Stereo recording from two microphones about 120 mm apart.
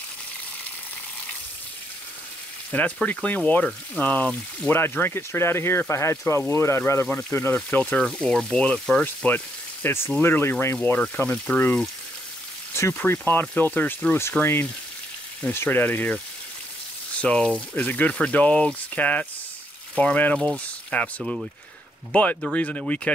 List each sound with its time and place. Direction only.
2.7 s speech: 15° left (ahead or behind)
9.0 s speech: 15° left (ahead or behind)
17.2 s speech: 10° left (ahead or behind)
21.2 s speech: 5° right (ahead or behind)
22.1 s speech: 15° left (ahead or behind)